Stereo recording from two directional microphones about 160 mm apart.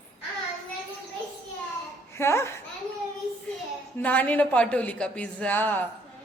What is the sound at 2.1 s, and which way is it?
Speech, 15° left (ahead or behind).